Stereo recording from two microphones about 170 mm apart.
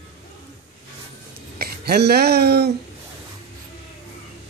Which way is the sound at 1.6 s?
70° right (ahead or behind).